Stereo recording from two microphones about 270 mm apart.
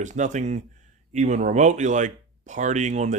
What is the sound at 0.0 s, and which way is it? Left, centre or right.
Speech, right.